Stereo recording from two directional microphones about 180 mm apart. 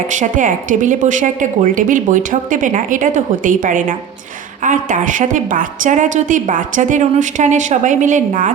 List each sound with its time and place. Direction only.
0.1 s a woman's voice: 45° right (ahead or behind)